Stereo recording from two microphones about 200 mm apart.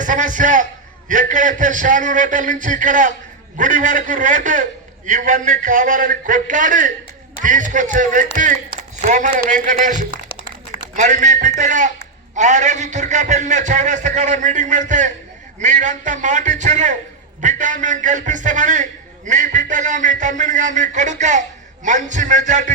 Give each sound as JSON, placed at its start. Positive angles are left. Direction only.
{"t": 0.0, "sound": "a man's voice", "side_deg": -40}